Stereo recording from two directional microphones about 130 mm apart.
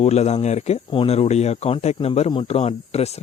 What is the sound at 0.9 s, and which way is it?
Speech, 50° left (ahead or behind).